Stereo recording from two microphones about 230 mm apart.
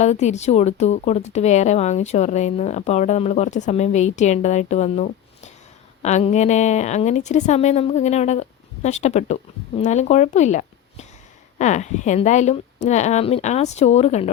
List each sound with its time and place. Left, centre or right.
0.0 s speech: left